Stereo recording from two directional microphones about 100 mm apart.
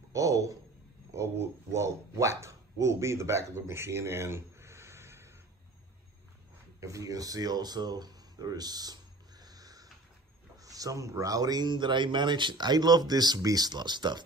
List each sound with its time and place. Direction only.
0.1 s speech: 30° right (ahead or behind)
6.8 s speech: 30° right (ahead or behind)